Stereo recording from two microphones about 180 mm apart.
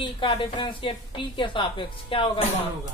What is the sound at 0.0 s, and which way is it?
Speech, 25° left (ahead or behind).